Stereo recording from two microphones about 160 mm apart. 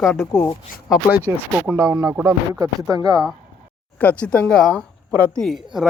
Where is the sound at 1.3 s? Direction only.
20° right (ahead or behind).